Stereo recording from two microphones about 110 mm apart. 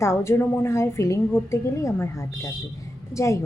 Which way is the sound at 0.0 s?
25° left (ahead or behind).